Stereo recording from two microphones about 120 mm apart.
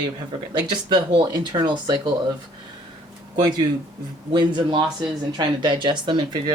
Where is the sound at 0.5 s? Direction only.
40° right (ahead or behind).